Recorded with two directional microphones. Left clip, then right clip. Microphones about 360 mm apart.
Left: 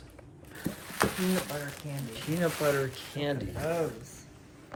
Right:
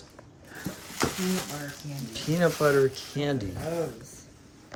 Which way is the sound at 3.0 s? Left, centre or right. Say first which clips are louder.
Right 3 dB; centre.